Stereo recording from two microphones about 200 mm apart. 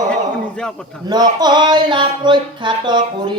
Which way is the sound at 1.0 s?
20° right (ahead or behind).